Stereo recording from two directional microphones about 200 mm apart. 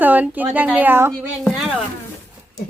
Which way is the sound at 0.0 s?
10° right (ahead or behind).